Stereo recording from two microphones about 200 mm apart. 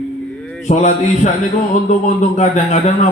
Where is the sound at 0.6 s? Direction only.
35° left (ahead or behind).